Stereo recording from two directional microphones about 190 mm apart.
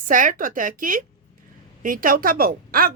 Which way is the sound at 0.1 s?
45° right (ahead or behind).